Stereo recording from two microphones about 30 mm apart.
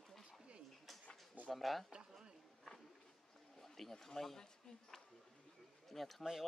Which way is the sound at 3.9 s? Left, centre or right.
Centre.